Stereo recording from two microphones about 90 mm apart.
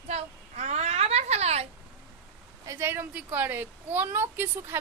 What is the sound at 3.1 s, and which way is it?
A woman's voice, 20° right (ahead or behind).